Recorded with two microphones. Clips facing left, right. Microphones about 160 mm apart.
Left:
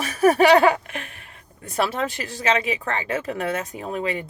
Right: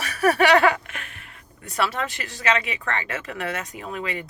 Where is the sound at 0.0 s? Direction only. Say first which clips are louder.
Left 3 dB; 35° left (ahead or behind).